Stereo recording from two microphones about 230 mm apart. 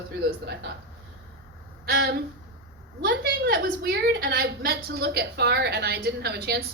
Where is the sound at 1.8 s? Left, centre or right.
Right.